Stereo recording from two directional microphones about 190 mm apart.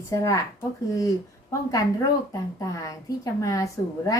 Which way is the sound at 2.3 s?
15° left (ahead or behind).